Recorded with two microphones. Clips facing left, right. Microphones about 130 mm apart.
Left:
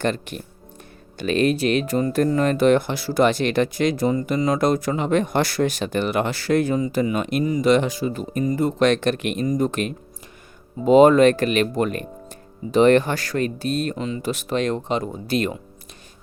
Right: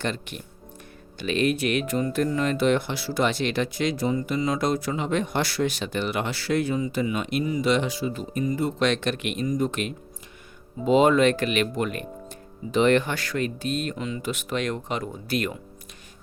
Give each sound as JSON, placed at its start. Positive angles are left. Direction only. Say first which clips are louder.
{"t": 0.0, "sound": "speech", "louder": "left 6 dB", "side_deg": 45}